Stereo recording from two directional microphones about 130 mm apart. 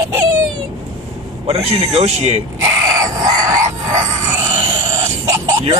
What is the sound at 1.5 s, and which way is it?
Speech, 50° right (ahead or behind).